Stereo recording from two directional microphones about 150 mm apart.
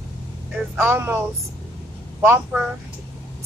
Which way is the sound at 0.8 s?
15° right (ahead or behind).